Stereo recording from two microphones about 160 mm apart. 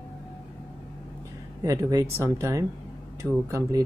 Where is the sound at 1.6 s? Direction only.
20° right (ahead or behind).